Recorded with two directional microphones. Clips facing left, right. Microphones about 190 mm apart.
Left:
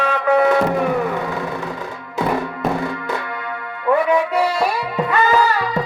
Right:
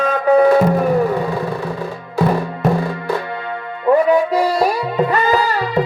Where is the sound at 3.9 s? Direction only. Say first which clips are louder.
Right 4 dB; 35° right (ahead or behind).